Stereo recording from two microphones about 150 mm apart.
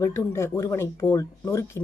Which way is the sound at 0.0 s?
20° left (ahead or behind).